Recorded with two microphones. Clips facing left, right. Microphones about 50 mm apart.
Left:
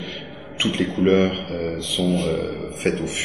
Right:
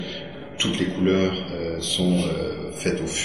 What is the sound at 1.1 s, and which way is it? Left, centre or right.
A man's voice, centre.